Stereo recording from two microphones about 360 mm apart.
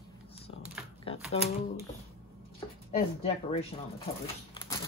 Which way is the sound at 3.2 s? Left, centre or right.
Centre.